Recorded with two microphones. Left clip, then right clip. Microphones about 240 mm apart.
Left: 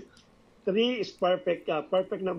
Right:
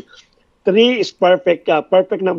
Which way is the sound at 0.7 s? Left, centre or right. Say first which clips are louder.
Right 14 dB; right.